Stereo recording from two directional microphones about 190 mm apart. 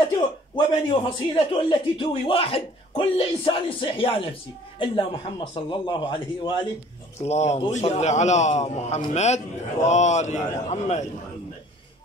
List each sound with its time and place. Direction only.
0.8 s a man's voice: 30° left (ahead or behind)